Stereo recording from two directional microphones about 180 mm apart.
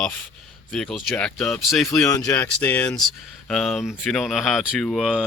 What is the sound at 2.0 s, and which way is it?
Speech, 20° left (ahead or behind).